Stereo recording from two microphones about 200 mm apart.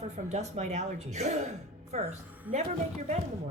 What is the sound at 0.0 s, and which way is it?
A woman's voice, 35° right (ahead or behind).